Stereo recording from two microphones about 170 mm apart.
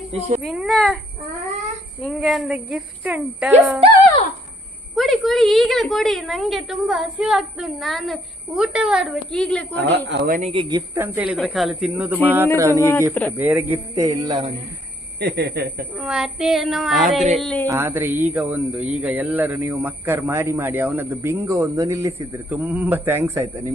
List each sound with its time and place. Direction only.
0.4 s a woman's voice: centre (ahead or behind)
2.0 s a woman's voice: centre (ahead or behind)
4.9 s a woman's voice: centre (ahead or behind)
10.2 s speech: 50° right (ahead or behind)
10.5 s speech: 30° right (ahead or behind)
10.9 s a man's voice: 10° right (ahead or behind)
12.8 s speech: 10° left (ahead or behind)
13.3 s a man's voice: 10° right (ahead or behind)
15.2 s speech: 75° right (ahead or behind)
16.0 s a woman's voice: 5° right (ahead or behind)
17.7 s a man's voice: 15° right (ahead or behind)